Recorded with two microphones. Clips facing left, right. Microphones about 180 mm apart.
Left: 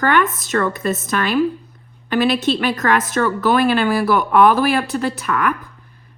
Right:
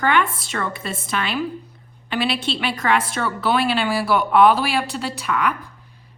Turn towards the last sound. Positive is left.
turn(degrees=50)  # may be behind; listen again after turning